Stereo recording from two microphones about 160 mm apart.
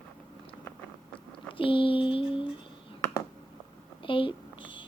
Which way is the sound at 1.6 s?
35° left (ahead or behind).